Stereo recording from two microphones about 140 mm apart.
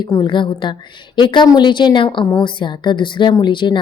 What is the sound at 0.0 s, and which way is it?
A woman's voice, 30° left (ahead or behind).